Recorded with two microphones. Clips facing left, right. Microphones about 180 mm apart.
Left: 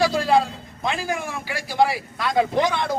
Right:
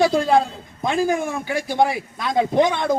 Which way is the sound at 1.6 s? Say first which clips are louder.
Left 1 dB; 20° right (ahead or behind).